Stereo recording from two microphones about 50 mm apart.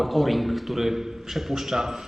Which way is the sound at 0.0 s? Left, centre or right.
Centre.